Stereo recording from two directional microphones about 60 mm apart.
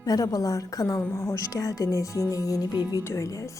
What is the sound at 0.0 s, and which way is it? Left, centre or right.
A woman's voice, left.